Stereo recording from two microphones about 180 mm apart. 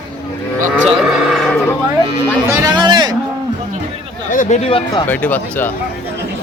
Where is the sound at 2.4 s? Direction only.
20° right (ahead or behind).